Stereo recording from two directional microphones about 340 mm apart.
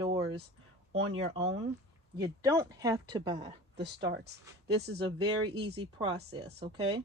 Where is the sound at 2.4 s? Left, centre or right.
Centre.